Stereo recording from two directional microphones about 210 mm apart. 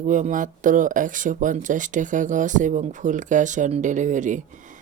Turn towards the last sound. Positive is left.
turn(degrees=-35)  # may be behind; listen again after turning